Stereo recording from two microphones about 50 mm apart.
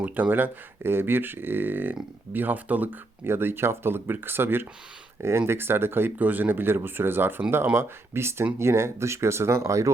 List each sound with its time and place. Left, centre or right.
0.0 s speech: right
3.2 s speech: right
5.2 s speech: right